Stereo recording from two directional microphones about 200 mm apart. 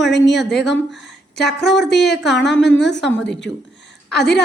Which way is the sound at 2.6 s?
60° left (ahead or behind).